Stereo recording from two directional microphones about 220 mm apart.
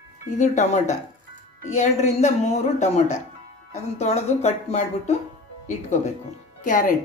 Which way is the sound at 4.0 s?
30° left (ahead or behind).